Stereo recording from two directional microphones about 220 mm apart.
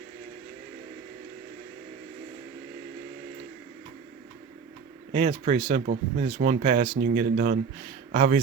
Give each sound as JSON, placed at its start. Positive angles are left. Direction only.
{"t": 5.1, "sound": "speech", "side_deg": -30}